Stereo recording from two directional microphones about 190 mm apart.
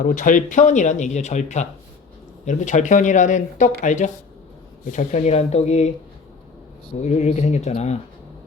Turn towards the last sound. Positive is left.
turn(degrees=35)  # may be behind; listen again after turning